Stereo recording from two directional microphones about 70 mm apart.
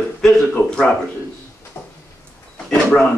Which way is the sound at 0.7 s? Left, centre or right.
Centre.